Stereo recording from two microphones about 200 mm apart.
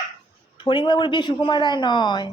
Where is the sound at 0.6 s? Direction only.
25° left (ahead or behind).